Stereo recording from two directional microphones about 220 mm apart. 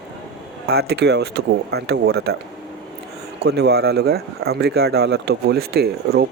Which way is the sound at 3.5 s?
50° right (ahead or behind).